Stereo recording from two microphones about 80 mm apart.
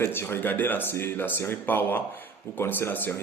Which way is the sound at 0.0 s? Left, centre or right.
Left.